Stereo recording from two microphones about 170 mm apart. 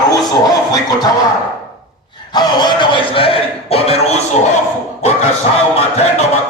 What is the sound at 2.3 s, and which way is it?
Music, 25° left (ahead or behind).